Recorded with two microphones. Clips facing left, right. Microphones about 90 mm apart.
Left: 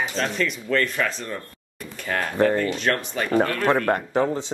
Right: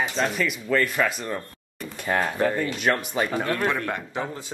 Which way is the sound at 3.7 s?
45° left (ahead or behind).